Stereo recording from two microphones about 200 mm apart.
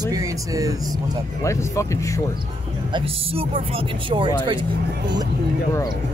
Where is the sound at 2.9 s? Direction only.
30° right (ahead or behind).